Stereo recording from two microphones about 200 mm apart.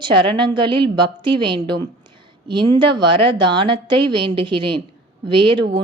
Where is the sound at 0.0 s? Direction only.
25° right (ahead or behind).